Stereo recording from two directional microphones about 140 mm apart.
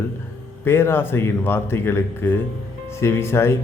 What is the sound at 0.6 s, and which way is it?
A man's voice, 15° left (ahead or behind).